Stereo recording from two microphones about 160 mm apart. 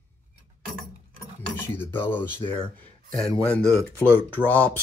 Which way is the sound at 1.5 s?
10° left (ahead or behind).